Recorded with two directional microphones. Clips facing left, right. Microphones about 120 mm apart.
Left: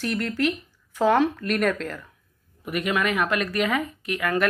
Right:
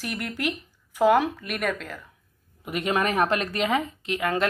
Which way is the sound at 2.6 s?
25° right (ahead or behind).